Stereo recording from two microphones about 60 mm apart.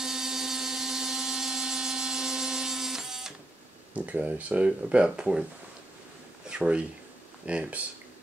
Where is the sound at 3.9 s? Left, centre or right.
Right.